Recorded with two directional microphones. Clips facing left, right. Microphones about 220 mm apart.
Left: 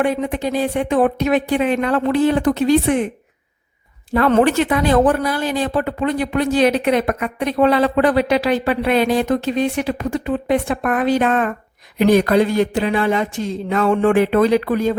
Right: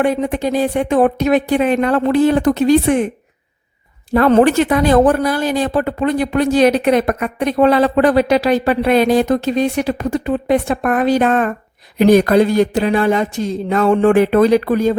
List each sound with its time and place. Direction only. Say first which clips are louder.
0.0 s speech: right 3 dB; 40° right (ahead or behind)
4.1 s speech: right 3 dB; 40° right (ahead or behind)